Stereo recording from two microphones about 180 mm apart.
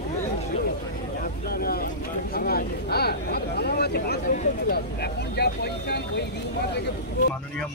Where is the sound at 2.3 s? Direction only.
60° left (ahead or behind).